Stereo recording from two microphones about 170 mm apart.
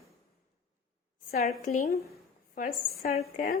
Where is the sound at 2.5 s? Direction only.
60° left (ahead or behind).